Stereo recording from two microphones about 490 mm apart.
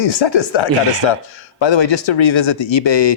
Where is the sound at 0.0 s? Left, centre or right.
Left.